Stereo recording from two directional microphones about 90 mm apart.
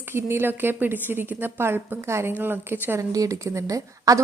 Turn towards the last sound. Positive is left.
turn(degrees=-40)  # may be behind; listen again after turning